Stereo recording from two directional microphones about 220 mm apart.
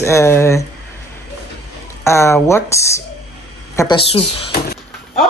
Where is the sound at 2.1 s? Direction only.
10° left (ahead or behind).